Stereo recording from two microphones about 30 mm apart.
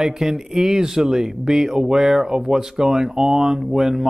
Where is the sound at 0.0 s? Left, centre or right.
Centre.